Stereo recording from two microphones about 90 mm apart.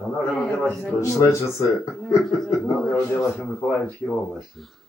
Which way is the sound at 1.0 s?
35° left (ahead or behind).